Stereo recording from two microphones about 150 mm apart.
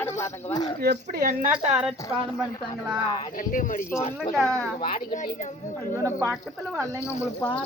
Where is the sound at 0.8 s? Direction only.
90° right; by 1.5 s 70° right (ahead or behind).